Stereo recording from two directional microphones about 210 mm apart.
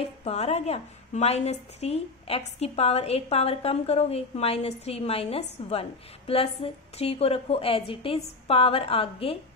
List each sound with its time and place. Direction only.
0.2 s a woman's voice: 30° left (ahead or behind)